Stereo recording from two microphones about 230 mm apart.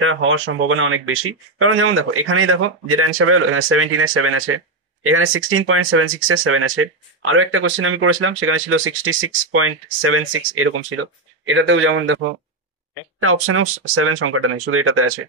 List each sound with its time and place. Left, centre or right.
0.0 s speech: right
13.2 s speech: right